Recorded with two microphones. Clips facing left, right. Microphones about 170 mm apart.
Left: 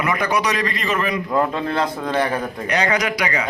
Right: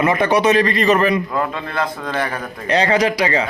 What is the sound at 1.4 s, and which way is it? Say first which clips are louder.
Speech: left 2 dB; 25° left (ahead or behind).